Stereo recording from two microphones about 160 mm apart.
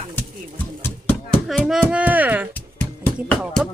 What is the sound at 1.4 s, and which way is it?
Speech, centre (ahead or behind).